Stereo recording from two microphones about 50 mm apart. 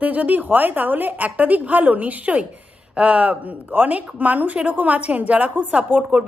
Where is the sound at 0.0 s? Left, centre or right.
Right.